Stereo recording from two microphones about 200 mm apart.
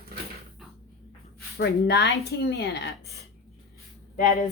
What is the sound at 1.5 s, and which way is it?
A woman's voice, 60° left (ahead or behind).